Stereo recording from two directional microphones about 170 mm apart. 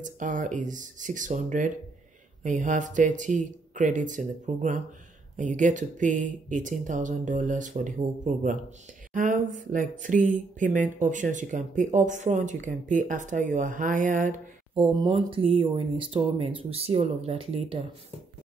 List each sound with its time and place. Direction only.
0.0 s speech: 50° right (ahead or behind)
15.0 s speech: 30° right (ahead or behind)